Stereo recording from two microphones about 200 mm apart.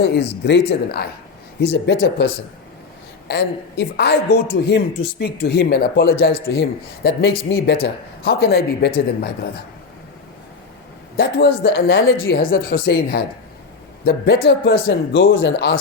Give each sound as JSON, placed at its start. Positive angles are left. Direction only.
{"t": 0.0, "sound": "speech", "side_deg": 60}
{"t": 1.6, "sound": "speech", "side_deg": 70}
{"t": 11.2, "sound": "speech", "side_deg": 50}
{"t": 15.1, "sound": "speech", "side_deg": 75}